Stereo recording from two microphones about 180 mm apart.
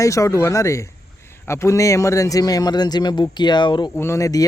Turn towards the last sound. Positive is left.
turn(degrees=20)  # may be behind; listen again after turning